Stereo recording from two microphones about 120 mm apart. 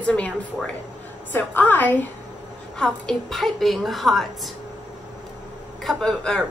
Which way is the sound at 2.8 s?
5° left (ahead or behind).